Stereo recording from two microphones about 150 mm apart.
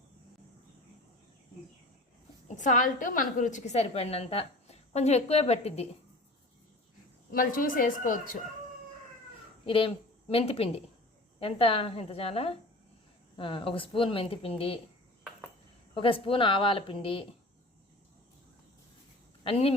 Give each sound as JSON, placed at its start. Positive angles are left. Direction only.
{"t": 2.6, "sound": "a woman's voice", "side_deg": 60}
{"t": 7.3, "sound": "speech", "side_deg": 70}
{"t": 9.6, "sound": "a woman's voice", "side_deg": 35}
{"t": 16.0, "sound": "speech", "side_deg": 35}
{"t": 19.5, "sound": "speech", "side_deg": 40}